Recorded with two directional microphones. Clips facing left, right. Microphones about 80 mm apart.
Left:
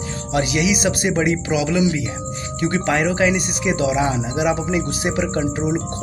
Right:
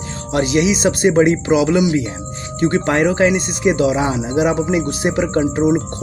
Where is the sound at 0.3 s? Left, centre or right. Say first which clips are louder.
Right 4 dB; right.